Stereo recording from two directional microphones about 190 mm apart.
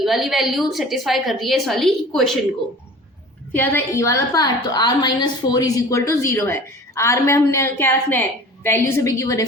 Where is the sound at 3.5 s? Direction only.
10° left (ahead or behind).